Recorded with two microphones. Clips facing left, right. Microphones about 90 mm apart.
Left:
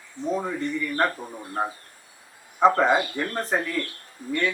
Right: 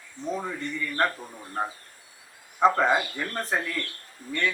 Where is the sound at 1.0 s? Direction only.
20° left (ahead or behind).